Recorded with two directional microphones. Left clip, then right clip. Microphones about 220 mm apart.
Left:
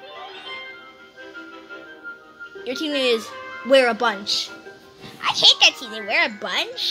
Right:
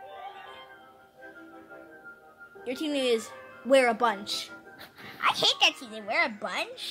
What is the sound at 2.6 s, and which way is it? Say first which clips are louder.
A woman's voice: left 7 dB; centre (ahead or behind).